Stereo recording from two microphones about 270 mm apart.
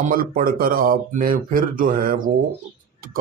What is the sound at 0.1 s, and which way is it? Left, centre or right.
Speech, right.